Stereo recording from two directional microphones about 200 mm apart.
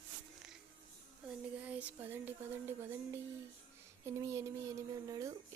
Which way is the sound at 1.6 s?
5° right (ahead or behind).